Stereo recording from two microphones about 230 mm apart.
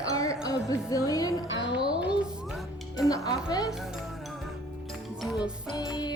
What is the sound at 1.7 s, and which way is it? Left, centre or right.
Music, centre.